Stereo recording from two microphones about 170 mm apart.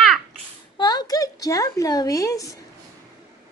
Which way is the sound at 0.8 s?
25° left (ahead or behind).